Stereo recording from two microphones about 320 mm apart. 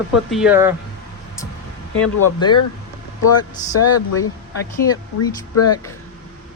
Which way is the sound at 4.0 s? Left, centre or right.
Left.